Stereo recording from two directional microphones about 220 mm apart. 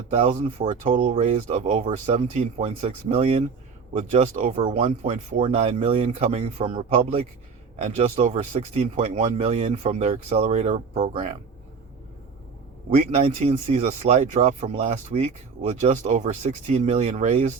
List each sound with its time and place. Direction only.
0.1 s speech: 25° right (ahead or behind)
12.9 s speech: 30° right (ahead or behind)